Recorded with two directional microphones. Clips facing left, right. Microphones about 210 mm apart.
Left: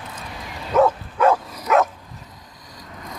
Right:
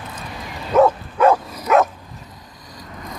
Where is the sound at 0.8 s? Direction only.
20° right (ahead or behind).